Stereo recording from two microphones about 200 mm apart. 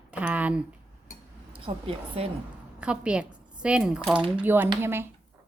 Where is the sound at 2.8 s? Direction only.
5° right (ahead or behind).